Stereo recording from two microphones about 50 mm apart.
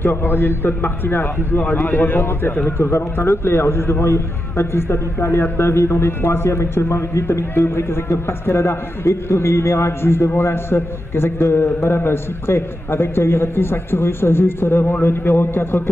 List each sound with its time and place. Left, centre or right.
0.0 s a man's voice: left
2.8 s a man's voice: left